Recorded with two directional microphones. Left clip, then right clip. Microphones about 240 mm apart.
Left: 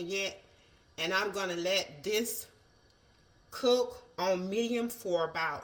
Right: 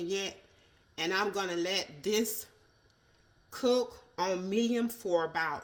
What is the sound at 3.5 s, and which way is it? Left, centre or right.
A woman's voice, right.